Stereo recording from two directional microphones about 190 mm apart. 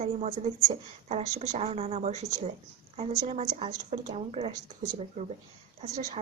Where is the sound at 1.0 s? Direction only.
35° right (ahead or behind).